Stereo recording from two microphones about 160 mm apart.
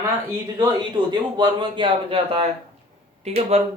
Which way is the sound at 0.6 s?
25° right (ahead or behind).